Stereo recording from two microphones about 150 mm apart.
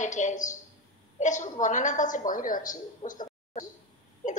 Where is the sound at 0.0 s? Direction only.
55° left (ahead or behind).